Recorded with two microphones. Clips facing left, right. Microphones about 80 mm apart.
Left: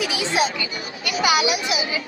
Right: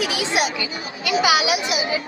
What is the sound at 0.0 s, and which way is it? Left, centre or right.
Speech, right.